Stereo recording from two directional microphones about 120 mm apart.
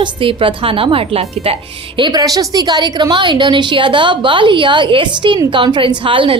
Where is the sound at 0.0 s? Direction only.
45° right (ahead or behind).